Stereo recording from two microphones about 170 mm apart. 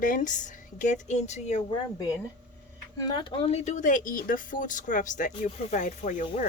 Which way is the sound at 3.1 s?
25° left (ahead or behind).